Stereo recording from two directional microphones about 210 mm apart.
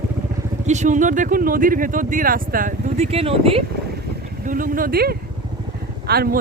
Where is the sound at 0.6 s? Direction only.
35° right (ahead or behind).